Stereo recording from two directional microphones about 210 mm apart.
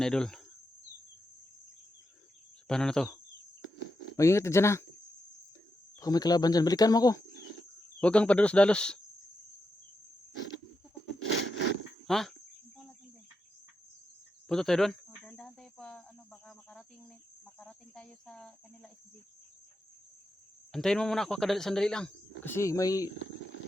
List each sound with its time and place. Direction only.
0.0 s speech: 5° left (ahead or behind)
2.6 s speech: 5° left (ahead or behind)
4.2 s speech: 15° left (ahead or behind)
6.0 s speech: 15° left (ahead or behind)
8.0 s speech: 5° left (ahead or behind)
12.0 s speech: centre (ahead or behind)
14.4 s cricket: centre (ahead or behind)
20.7 s speech: centre (ahead or behind)